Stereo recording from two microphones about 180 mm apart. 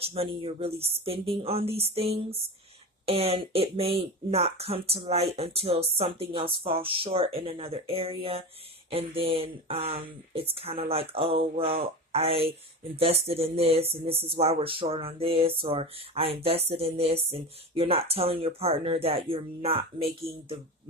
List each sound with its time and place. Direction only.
0.0 s speech: 35° right (ahead or behind)